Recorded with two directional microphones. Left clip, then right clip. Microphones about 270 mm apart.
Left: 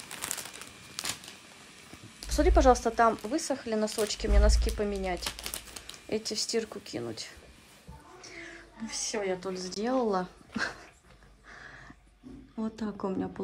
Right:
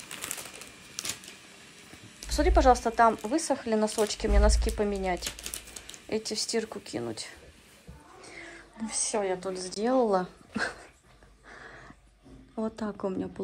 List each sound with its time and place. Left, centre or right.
0.1 s a sound: centre
2.2 s speech: centre
5.2 s typewriter: left
6.0 s speech: centre
8.4 s speech: centre
11.5 s dog: centre
12.5 s speech: centre